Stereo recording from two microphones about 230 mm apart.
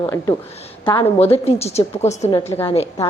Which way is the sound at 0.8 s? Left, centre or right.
Left.